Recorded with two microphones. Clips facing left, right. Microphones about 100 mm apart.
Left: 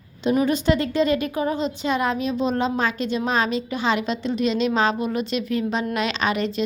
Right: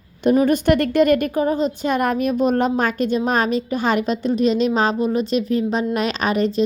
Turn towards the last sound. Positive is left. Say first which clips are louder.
# right 4 dB
turn(degrees=-40)  # may be behind; listen again after turning